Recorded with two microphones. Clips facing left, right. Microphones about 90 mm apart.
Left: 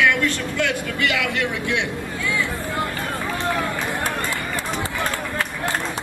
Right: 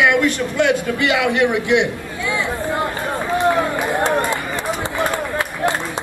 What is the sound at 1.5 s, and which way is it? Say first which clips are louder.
Chatter: right 7 dB; 20° right (ahead or behind).